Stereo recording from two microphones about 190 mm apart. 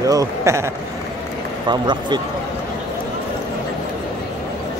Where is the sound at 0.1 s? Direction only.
15° right (ahead or behind).